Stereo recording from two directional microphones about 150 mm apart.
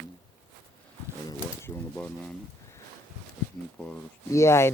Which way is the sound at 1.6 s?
15° left (ahead or behind).